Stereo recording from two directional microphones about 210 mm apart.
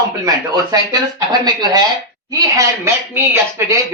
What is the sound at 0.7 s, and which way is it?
Speech, 15° right (ahead or behind).